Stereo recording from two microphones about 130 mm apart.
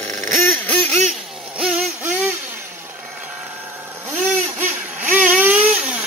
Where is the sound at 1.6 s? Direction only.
10° right (ahead or behind).